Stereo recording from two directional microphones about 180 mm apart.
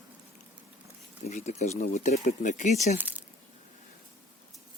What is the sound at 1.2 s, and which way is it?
Speech, 40° left (ahead or behind).